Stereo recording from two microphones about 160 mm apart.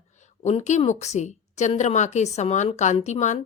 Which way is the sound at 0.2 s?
45° left (ahead or behind).